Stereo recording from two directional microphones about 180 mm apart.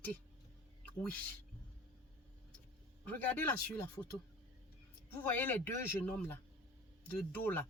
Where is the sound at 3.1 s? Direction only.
10° left (ahead or behind).